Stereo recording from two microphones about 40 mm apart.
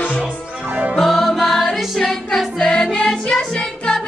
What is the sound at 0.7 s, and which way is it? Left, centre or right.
Music, right.